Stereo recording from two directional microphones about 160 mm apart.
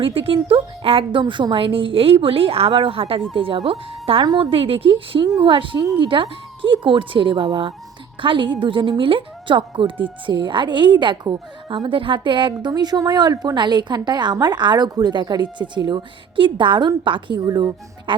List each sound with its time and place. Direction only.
0.0 s a woman's voice: 35° right (ahead or behind)